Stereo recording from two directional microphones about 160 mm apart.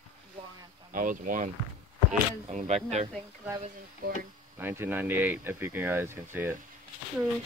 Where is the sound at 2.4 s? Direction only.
45° right (ahead or behind).